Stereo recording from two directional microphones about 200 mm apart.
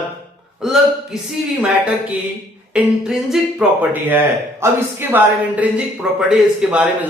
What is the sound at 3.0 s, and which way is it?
Speech, 5° right (ahead or behind).